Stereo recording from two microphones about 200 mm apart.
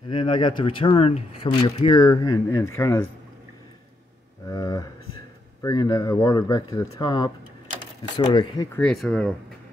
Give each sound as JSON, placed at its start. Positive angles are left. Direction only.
{"t": 0.1, "sound": "speech", "side_deg": 25}
{"t": 4.5, "sound": "speech", "side_deg": 15}
{"t": 8.7, "sound": "speech", "side_deg": 5}